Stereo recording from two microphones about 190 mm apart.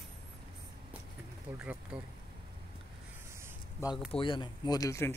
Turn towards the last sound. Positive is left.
turn(degrees=15)  # may be behind; listen again after turning